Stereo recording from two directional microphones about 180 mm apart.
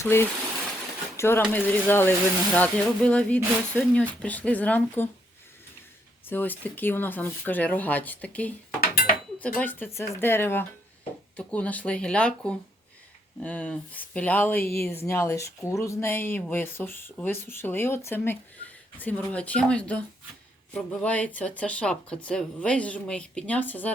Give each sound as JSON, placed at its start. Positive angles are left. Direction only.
{"t": 0.0, "sound": "speech", "side_deg": 15}
{"t": 6.2, "sound": "speech", "side_deg": 10}
{"t": 8.8, "sound": "cutlery", "side_deg": 55}
{"t": 9.6, "sound": "speech", "side_deg": 10}